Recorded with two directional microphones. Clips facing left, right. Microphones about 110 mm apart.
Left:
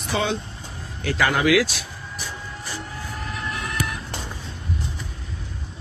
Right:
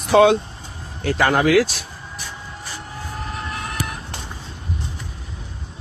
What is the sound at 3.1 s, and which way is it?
Vehicle, 35° right (ahead or behind).